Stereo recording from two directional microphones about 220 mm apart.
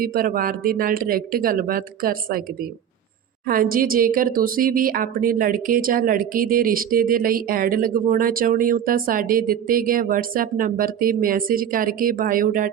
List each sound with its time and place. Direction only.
0.0 s a woman's voice: 40° right (ahead or behind)